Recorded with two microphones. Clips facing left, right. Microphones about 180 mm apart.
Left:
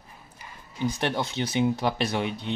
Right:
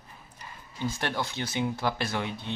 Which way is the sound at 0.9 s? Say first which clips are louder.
Left 3 dB; 20° left (ahead or behind).